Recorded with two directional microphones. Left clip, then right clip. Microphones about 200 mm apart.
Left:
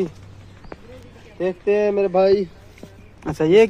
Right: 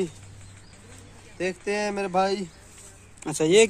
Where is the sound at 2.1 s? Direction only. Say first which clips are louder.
Left 7 dB; 60° right (ahead or behind).